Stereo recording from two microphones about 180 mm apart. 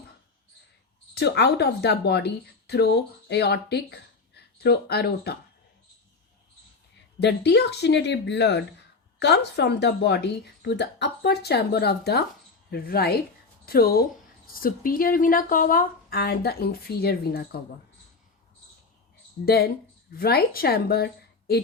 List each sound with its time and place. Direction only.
1.1 s a woman's voice: 65° left (ahead or behind)
7.2 s a woman's voice: 70° left (ahead or behind)
19.5 s a woman's voice: 60° left (ahead or behind)